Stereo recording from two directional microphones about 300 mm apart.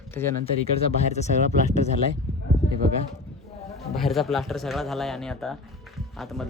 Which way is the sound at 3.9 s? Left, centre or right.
Centre.